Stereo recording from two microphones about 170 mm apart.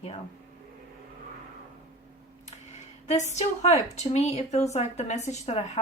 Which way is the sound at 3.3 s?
40° left (ahead or behind).